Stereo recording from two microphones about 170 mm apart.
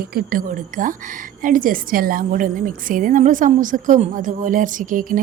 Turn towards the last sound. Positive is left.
turn(degrees=-55)  # may be behind; listen again after turning